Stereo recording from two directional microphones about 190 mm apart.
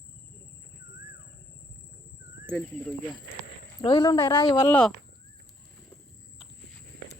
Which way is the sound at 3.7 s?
25° left (ahead or behind).